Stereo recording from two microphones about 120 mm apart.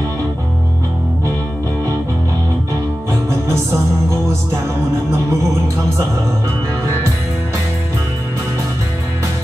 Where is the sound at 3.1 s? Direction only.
20° right (ahead or behind).